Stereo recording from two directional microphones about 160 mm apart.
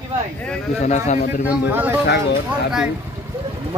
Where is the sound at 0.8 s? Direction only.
45° left (ahead or behind).